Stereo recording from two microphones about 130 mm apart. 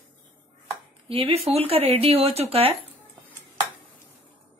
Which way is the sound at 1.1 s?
50° right (ahead or behind).